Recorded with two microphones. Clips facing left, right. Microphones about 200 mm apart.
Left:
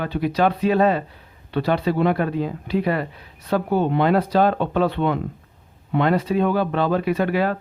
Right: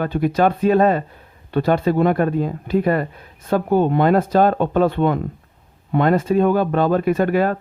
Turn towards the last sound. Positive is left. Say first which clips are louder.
# right 3 dB
turn(degrees=-45)  # may be behind; listen again after turning